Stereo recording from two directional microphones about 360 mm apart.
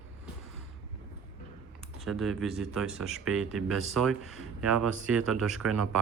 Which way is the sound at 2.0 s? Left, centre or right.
Centre.